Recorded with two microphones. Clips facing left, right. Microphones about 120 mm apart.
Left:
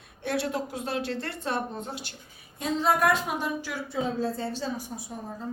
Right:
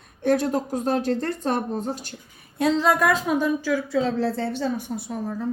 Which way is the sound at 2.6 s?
90° right.